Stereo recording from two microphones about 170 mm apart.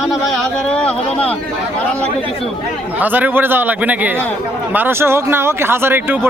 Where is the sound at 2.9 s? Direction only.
10° right (ahead or behind).